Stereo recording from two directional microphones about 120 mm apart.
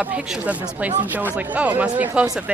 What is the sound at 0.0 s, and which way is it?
Speech, 10° right (ahead or behind).